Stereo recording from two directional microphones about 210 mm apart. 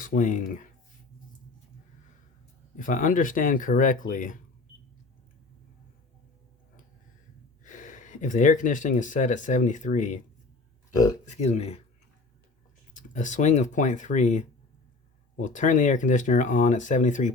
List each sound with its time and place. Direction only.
0.0 s speech: 40° left (ahead or behind)
2.7 s speech: 40° left (ahead or behind)
7.6 s speech: 35° left (ahead or behind)
11.3 s speech: 30° left (ahead or behind)
12.9 s speech: 35° left (ahead or behind)